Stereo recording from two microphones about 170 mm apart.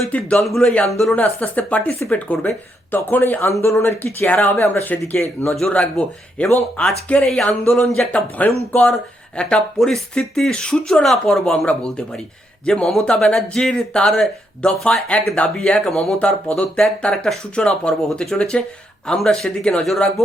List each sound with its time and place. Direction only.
0.0 s speech: 5° left (ahead or behind)